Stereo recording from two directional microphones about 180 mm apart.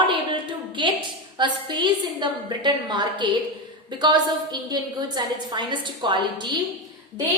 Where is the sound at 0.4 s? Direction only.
25° right (ahead or behind).